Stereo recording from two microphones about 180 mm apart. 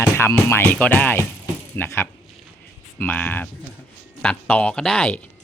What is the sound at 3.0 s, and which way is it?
Speech, 10° left (ahead or behind).